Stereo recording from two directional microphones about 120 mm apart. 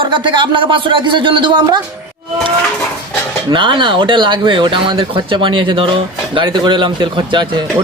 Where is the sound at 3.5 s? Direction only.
40° right (ahead or behind).